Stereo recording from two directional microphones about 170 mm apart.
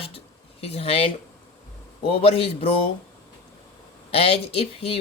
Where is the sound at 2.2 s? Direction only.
35° left (ahead or behind).